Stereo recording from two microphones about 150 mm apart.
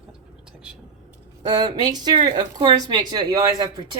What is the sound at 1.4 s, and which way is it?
Speech, 30° right (ahead or behind).